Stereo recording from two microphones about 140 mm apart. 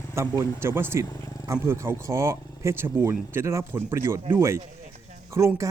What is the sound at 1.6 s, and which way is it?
Speech, 20° right (ahead or behind).